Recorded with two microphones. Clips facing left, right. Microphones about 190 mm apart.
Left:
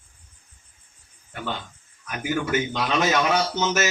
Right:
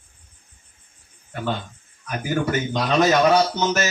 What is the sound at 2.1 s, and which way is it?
Speech, 40° right (ahead or behind).